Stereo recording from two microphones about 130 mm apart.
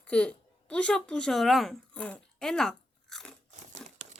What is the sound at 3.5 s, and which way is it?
Crumpling, 65° right (ahead or behind).